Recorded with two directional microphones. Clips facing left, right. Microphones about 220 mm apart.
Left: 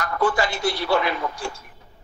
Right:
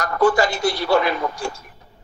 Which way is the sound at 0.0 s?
40° right (ahead or behind).